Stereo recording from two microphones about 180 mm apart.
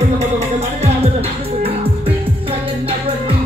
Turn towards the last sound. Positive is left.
turn(degrees=-30)  # may be behind; listen again after turning